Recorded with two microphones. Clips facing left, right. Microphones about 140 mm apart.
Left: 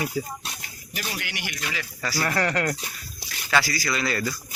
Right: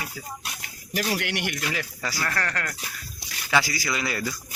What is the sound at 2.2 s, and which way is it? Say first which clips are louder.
Speech: left 6 dB; 15° left (ahead or behind).